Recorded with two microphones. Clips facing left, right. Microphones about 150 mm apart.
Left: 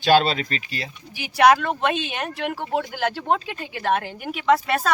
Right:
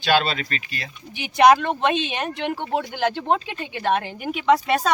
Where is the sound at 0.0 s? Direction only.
40° left (ahead or behind).